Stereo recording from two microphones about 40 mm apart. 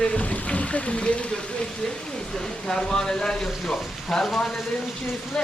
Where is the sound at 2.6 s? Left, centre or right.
Centre.